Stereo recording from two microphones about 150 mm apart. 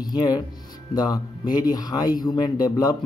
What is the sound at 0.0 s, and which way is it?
Speech, 25° left (ahead or behind).